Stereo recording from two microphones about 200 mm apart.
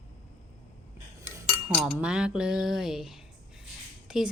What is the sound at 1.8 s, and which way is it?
A woman's voice, 5° right (ahead or behind).